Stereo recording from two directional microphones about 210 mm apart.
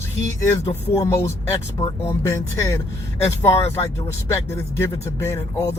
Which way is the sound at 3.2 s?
30° left (ahead or behind).